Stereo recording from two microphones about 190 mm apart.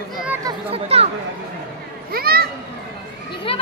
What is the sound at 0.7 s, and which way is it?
Speech, 30° right (ahead or behind).